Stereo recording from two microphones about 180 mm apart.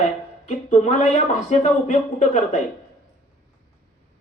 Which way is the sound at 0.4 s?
40° left (ahead or behind).